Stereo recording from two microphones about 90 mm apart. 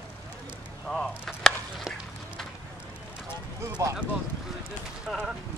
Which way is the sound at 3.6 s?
30° right (ahead or behind).